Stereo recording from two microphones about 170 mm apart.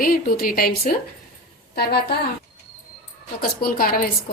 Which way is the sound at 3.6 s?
60° left (ahead or behind).